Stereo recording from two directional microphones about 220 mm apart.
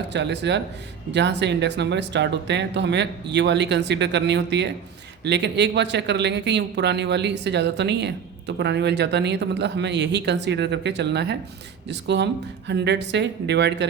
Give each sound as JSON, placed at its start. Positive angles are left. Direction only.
{"t": 0.1, "sound": "speech", "side_deg": -50}